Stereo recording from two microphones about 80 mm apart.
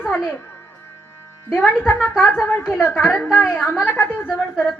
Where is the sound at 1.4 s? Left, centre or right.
Left.